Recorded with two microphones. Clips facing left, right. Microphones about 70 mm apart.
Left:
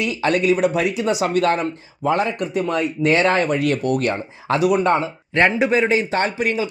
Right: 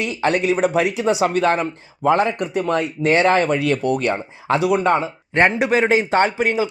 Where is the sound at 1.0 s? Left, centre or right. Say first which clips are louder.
Even; centre.